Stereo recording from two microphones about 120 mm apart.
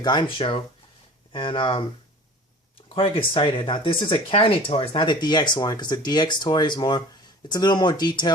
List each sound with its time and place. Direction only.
0.0 s speech: 40° left (ahead or behind)
2.9 s speech: 45° left (ahead or behind)